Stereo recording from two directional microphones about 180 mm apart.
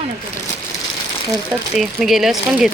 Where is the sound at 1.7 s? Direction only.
Centre (ahead or behind).